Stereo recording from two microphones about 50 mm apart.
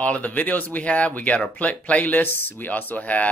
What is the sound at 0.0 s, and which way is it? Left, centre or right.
Speech, left.